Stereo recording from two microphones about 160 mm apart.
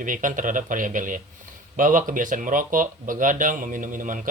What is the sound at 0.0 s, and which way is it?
Speech, 55° right (ahead or behind).